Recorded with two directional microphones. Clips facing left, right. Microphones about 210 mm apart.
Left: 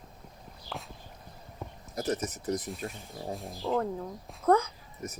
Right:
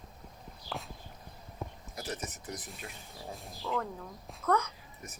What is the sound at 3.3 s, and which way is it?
Speech, centre (ahead or behind).